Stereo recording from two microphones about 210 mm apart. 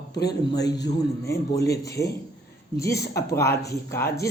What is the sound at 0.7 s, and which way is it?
Speech, 20° left (ahead or behind).